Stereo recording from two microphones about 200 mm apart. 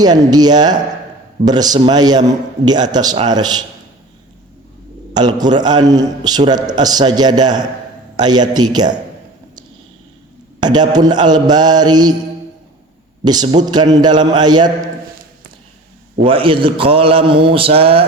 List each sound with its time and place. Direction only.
0.0 s a man's voice: 20° right (ahead or behind)
5.1 s a man's voice: 20° right (ahead or behind)
10.6 s a man's voice: 20° right (ahead or behind)
13.2 s a man's voice: 20° right (ahead or behind)
16.2 s a man's voice: 25° right (ahead or behind)